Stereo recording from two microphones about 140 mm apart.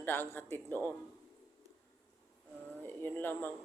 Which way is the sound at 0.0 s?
15° left (ahead or behind).